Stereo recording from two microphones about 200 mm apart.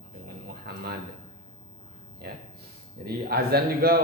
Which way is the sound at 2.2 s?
55° right (ahead or behind).